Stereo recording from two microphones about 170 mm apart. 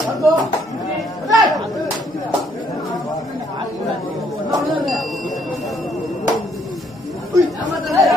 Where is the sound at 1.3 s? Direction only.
Centre (ahead or behind).